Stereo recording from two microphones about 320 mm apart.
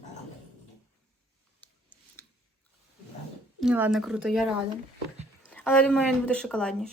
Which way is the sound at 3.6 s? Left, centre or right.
Centre.